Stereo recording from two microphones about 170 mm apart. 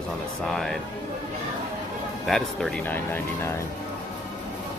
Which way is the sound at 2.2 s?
5° left (ahead or behind).